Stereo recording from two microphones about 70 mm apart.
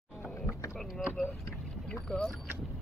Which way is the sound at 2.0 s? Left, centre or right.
Centre.